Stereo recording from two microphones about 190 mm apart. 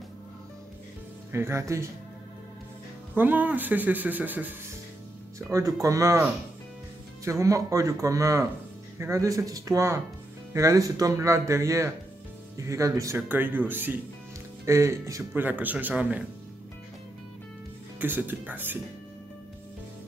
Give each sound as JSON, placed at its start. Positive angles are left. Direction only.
{"t": 1.3, "sound": "speech", "side_deg": -15}
{"t": 3.2, "sound": "speech", "side_deg": -10}
{"t": 7.2, "sound": "speech", "side_deg": -15}
{"t": 17.9, "sound": "speech", "side_deg": -10}